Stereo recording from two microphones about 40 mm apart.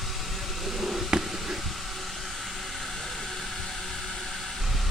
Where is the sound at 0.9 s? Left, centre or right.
Centre.